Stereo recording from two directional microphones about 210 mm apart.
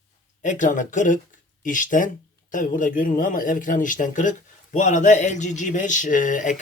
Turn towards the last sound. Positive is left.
turn(degrees=40)  # may be behind; listen again after turning